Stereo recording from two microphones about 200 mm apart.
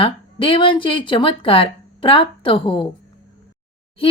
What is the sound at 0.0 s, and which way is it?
Speech, 25° left (ahead or behind).